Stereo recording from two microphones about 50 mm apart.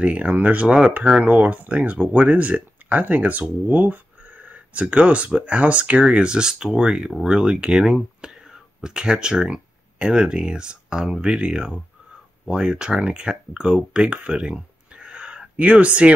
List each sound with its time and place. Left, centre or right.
0.0 s speech: right